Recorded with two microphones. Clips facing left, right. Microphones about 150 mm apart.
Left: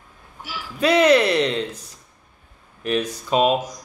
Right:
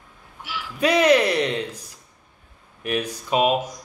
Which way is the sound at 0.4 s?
40° left (ahead or behind).